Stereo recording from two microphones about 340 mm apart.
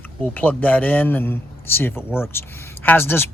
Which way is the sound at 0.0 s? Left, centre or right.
Centre.